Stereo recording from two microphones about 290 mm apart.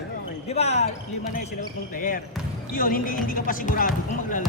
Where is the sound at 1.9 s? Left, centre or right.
Left.